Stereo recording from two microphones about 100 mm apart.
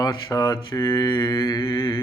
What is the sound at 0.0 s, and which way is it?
Mantra, 40° left (ahead or behind).